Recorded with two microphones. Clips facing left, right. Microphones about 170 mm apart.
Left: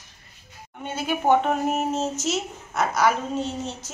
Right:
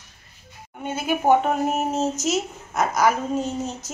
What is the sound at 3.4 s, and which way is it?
Speech, 45° right (ahead or behind).